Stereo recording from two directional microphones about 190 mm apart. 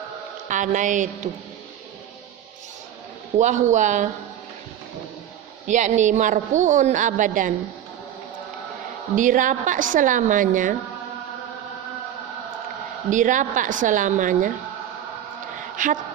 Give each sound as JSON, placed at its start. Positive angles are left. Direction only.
{"t": 0.4, "sound": "a woman's voice", "side_deg": -40}
{"t": 3.3, "sound": "a woman's voice", "side_deg": -40}
{"t": 5.6, "sound": "a woman's voice", "side_deg": -40}
{"t": 9.1, "sound": "a woman's voice", "side_deg": -45}
{"t": 13.1, "sound": "a woman's voice", "side_deg": -40}
{"t": 15.7, "sound": "a sound", "side_deg": -45}